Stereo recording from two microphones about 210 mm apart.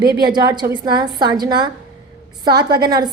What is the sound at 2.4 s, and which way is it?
Speech, 50° right (ahead or behind).